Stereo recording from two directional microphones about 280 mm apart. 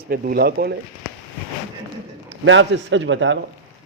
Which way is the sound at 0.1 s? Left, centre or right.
Right.